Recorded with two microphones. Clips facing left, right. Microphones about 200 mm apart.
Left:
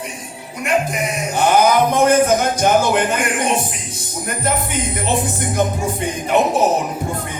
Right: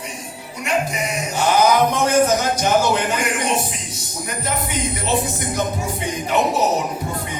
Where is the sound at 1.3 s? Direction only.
55° left (ahead or behind).